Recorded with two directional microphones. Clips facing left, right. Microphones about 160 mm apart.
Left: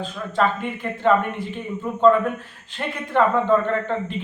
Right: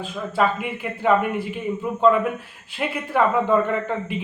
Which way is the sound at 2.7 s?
10° right (ahead or behind).